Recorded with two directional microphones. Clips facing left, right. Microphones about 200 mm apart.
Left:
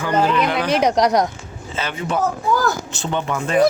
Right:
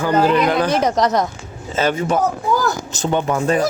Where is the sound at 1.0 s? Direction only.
15° left (ahead or behind).